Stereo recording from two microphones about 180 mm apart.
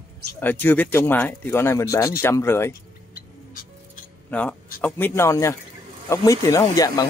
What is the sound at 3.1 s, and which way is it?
Music, 55° left (ahead or behind).